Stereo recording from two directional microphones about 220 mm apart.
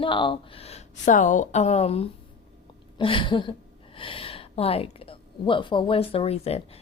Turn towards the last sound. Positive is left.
turn(degrees=30)  # may be behind; listen again after turning